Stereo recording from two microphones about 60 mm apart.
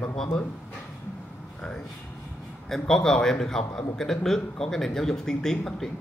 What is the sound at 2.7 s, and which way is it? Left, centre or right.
A man's voice, centre.